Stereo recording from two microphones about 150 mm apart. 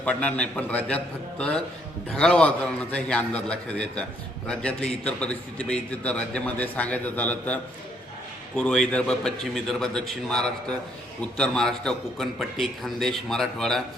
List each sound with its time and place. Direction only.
0.0 s a man's voice: 10° left (ahead or behind)